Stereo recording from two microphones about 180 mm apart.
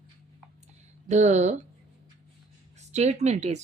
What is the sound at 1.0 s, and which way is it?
Speech, 40° right (ahead or behind).